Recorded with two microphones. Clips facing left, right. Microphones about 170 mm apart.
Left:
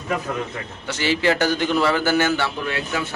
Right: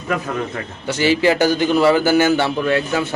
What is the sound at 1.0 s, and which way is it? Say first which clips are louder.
A man's voice: right 5 dB; 10° right (ahead or behind).